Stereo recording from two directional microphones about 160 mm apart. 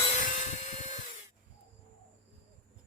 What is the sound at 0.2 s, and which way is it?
Tools, 55° left (ahead or behind).